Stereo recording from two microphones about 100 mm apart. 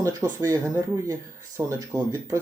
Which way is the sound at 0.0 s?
35° right (ahead or behind).